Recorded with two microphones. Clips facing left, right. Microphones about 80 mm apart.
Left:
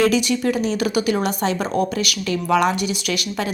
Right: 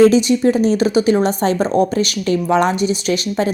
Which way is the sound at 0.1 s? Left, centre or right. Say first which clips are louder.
Right 6 dB; right.